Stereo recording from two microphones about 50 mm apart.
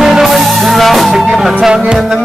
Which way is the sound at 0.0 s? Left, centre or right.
Centre.